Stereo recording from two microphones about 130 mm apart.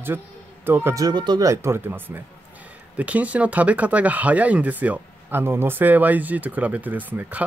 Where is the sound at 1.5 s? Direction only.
20° right (ahead or behind).